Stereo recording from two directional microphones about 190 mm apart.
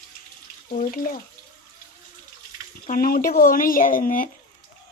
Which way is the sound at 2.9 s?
50° left (ahead or behind).